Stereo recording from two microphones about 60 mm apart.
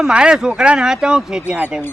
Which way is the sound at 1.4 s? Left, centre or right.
Right.